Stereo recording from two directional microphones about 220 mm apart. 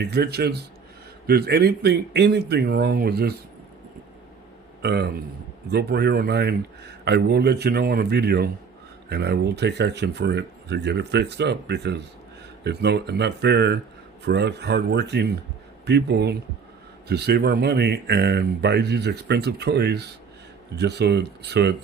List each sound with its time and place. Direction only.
0.0 s speech: 50° right (ahead or behind)
4.8 s speech: 45° right (ahead or behind)